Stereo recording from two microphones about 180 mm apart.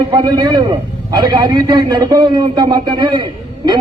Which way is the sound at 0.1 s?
25° right (ahead or behind).